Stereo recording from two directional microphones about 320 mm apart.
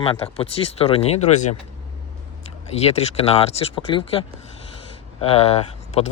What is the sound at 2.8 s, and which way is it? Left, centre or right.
Speech, centre.